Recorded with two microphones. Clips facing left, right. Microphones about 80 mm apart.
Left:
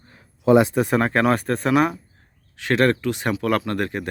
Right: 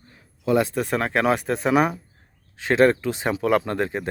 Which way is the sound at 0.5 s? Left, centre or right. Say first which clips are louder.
Left 5 dB; centre.